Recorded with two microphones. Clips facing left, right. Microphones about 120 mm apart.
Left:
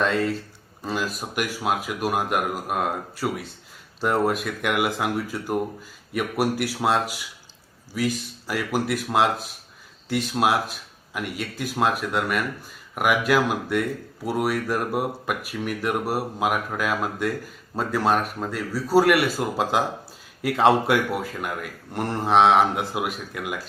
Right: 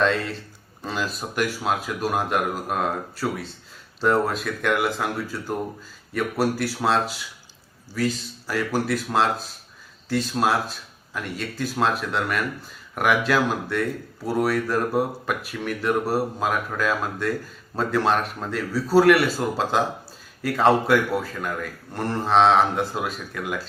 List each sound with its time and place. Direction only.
0.9 s speech: 10° left (ahead or behind)